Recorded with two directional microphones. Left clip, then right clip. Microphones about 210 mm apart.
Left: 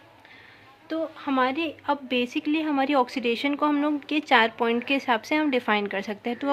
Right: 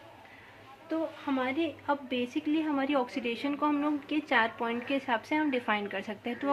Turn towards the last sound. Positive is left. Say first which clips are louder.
# left 5 dB
turn(degrees=25)  # may be behind; listen again after turning